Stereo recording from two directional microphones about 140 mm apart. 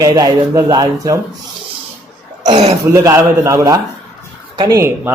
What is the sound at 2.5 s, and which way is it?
Speech, 50° right (ahead or behind).